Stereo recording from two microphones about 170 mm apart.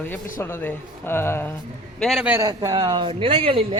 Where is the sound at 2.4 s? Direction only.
20° right (ahead or behind).